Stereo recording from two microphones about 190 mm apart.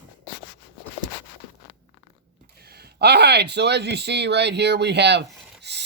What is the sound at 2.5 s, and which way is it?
Speech, 55° right (ahead or behind).